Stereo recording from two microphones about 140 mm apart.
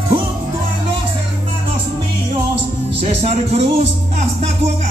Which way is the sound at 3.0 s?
45° right (ahead or behind).